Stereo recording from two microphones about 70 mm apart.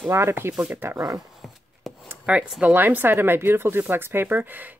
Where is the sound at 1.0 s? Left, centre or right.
Right.